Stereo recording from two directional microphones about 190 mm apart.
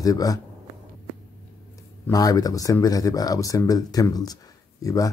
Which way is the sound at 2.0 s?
20° left (ahead or behind).